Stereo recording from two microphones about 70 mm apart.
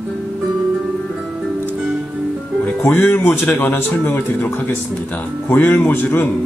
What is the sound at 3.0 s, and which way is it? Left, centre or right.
Speech, left.